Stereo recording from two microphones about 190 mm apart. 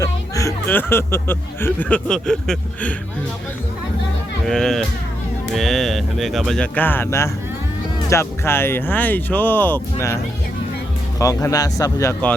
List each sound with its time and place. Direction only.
0.0 s speech: 15° left (ahead or behind)
4.4 s speech: centre (ahead or behind)
11.2 s speech: 20° left (ahead or behind)